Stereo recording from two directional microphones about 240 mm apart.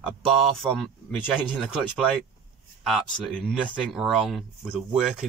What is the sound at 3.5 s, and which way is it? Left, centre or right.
Speech, centre.